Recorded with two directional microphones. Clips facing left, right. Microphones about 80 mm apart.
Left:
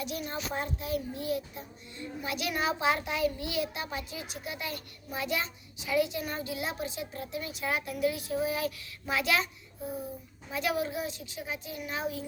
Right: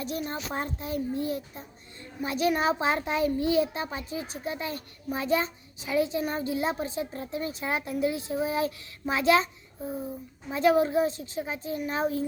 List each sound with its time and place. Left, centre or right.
0.0 s a child's voice: right